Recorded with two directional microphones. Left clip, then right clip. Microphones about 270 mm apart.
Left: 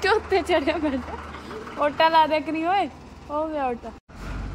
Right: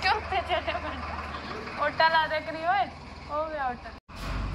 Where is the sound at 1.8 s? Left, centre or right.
Left.